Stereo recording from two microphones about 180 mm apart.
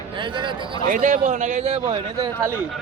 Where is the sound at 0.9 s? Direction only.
45° right (ahead or behind).